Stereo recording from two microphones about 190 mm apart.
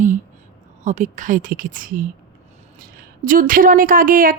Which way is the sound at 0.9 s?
40° right (ahead or behind).